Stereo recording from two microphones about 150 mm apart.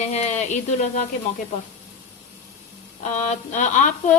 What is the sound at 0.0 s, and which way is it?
Speech, 50° left (ahead or behind).